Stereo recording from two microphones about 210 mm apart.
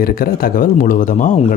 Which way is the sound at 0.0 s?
45° left (ahead or behind).